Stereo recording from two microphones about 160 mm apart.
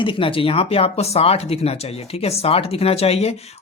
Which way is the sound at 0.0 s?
35° left (ahead or behind).